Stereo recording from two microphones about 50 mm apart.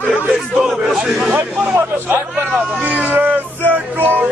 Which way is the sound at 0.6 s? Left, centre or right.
Centre.